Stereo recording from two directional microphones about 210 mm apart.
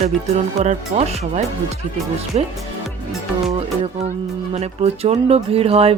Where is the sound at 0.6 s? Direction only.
30° right (ahead or behind).